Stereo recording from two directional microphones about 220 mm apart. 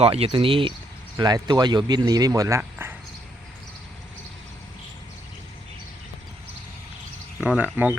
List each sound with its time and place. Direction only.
0.0 s speech: 25° right (ahead or behind); by 2.9 s 10° right (ahead or behind)
7.4 s speech: 5° right (ahead or behind)